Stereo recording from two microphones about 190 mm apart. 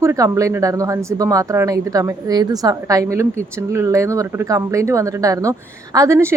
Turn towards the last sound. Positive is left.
turn(degrees=-15)  # may be behind; listen again after turning